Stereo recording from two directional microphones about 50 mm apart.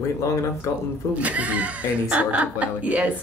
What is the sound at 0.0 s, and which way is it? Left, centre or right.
Speech, left.